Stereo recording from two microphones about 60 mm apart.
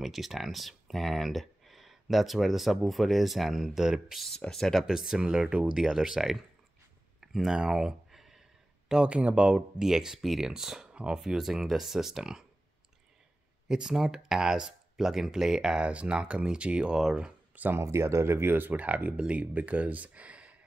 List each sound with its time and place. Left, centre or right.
0.0 s speech: centre
4.2 s speech: centre
4.8 s speech: centre
7.2 s a sound: centre
9.0 s speech: centre
10.9 s a sound: centre
11.1 s speech: centre
13.7 s speech: centre
17.7 s speech: right